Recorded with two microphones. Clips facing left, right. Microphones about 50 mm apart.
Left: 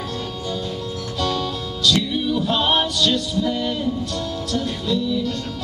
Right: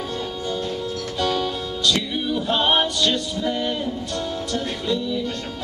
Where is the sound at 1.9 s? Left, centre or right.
Centre.